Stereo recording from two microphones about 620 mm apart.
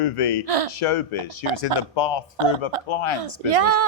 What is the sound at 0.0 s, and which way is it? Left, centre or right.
Speech, left.